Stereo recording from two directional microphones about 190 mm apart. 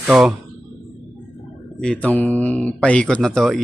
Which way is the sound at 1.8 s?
5° left (ahead or behind).